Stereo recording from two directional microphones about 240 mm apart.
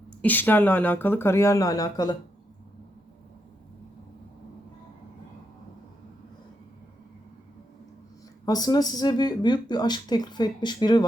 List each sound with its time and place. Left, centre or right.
0.2 s speech: centre
8.4 s speech: centre